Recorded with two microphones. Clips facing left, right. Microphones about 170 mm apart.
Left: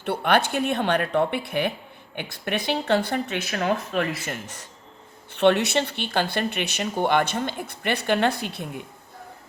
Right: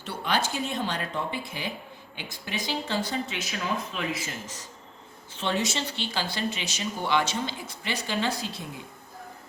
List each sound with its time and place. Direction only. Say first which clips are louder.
0.0 s speech: left 7 dB; 60° left (ahead or behind)